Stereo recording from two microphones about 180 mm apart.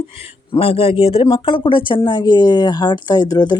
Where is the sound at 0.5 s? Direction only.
35° left (ahead or behind).